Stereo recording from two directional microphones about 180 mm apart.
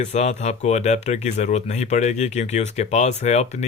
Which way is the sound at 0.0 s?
40° left (ahead or behind).